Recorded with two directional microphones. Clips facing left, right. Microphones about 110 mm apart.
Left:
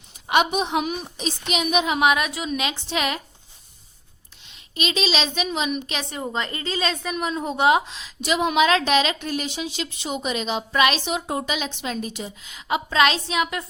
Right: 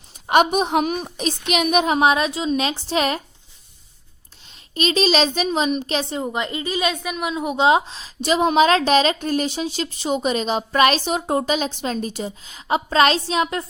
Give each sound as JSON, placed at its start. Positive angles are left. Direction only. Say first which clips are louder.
{"t": 0.3, "sound": "a woman's voice", "louder": "right 4 dB", "side_deg": -45}
{"t": 4.4, "sound": "a woman's voice", "louder": "right 5 dB", "side_deg": -40}
{"t": 6.2, "sound": "a woman's voice", "louder": "right 3 dB", "side_deg": -20}
{"t": 7.5, "sound": "a woman's voice", "louder": "right 2 dB", "side_deg": -25}